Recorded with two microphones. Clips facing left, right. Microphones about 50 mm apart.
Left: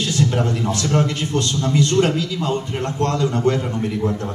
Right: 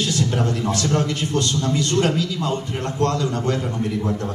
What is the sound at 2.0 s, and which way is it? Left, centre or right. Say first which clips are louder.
Speech: left 2 dB; centre.